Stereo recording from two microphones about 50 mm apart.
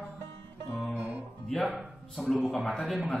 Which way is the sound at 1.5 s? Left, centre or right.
Centre.